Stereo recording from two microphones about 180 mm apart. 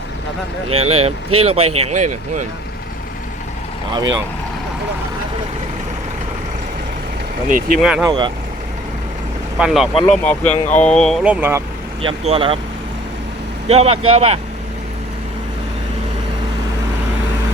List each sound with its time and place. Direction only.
0.7 s speech: 35° right (ahead or behind)
7.4 s speech: 50° right (ahead or behind)
7.8 s speech: 5° right (ahead or behind)
8.0 s speech: 25° right (ahead or behind)
9.6 s speech: 5° right (ahead or behind)
10.1 s speech: 5° left (ahead or behind); by 11.6 s 10° right (ahead or behind)
12.0 s speech: 30° right (ahead or behind)
13.7 s speech: 35° right (ahead or behind)